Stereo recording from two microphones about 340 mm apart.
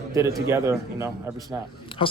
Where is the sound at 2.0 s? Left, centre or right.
Centre.